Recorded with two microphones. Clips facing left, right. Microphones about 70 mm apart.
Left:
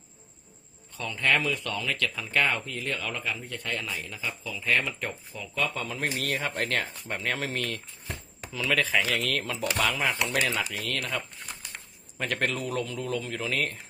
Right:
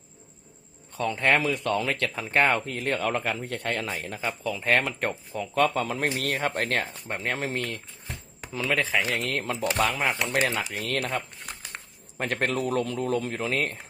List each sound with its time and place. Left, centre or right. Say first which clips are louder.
0.9 s speech: right 3 dB; right
3.7 s a man's voice: right 3 dB; right; by 9.2 s centre
9.5 s a man's voice: right 5 dB; right